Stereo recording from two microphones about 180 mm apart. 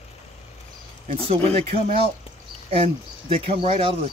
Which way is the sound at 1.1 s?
35° right (ahead or behind).